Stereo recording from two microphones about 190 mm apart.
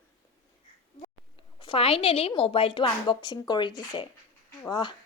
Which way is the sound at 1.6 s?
30° left (ahead or behind).